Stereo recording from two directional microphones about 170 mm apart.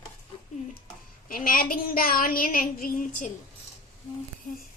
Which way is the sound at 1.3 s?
55° left (ahead or behind).